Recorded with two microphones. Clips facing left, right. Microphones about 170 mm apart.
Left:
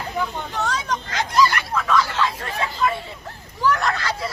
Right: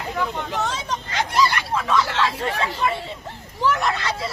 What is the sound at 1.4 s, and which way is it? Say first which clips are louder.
Hubbub: left 2 dB; 25° right (ahead or behind).